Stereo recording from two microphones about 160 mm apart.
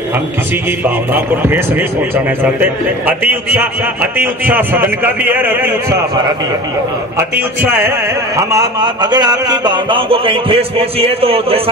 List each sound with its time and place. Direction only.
0.7 s a man's voice: 15° right (ahead or behind)
7.7 s carnatic music: 15° right (ahead or behind); by 11.7 s 35° right (ahead or behind)